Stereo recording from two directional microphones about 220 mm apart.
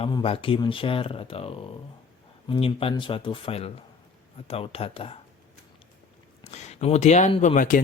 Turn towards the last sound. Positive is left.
turn(degrees=35)  # may be behind; listen again after turning